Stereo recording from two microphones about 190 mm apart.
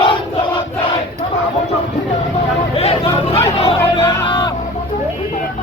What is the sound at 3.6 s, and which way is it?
Music, 30° left (ahead or behind).